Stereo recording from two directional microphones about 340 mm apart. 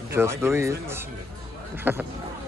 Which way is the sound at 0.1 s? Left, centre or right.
Centre.